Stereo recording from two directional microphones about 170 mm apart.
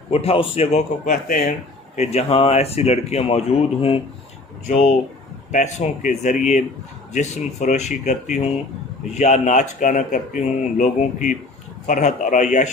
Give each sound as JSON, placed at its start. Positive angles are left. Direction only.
{"t": 0.1, "sound": "speech", "side_deg": 35}
{"t": 1.1, "sound": "speech", "side_deg": 55}
{"t": 2.0, "sound": "speech", "side_deg": 40}
{"t": 5.5, "sound": "speech", "side_deg": 45}